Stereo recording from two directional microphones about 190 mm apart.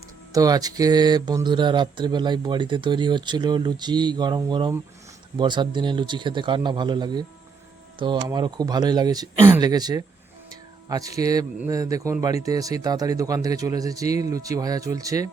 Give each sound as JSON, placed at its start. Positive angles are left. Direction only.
{"t": 0.3, "sound": "speech", "side_deg": -20}
{"t": 10.5, "sound": "music", "side_deg": -20}
{"t": 11.5, "sound": "speech", "side_deg": -15}